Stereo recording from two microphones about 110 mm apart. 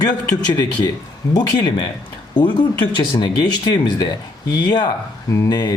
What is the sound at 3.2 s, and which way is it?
Speech, 40° left (ahead or behind).